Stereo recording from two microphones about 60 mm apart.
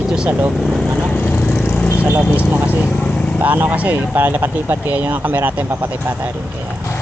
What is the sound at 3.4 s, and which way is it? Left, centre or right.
Speech, right.